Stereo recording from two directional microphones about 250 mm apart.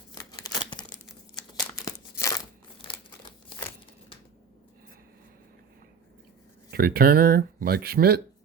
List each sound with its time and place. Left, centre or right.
0.1 s scissors: centre
1.8 s crumpling: centre
6.7 s speech: right